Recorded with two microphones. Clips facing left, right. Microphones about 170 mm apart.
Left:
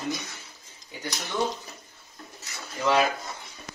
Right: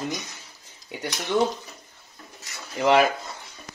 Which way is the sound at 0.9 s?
75° right (ahead or behind).